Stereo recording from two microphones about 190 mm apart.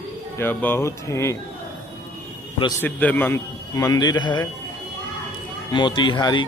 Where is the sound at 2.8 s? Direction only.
10° left (ahead or behind).